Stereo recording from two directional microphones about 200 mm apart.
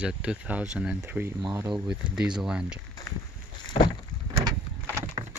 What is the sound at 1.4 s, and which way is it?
Speech, 20° right (ahead or behind).